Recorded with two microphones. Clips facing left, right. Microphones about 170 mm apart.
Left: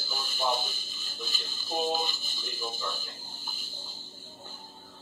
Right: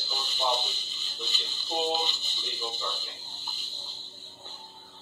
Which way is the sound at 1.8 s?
10° left (ahead or behind).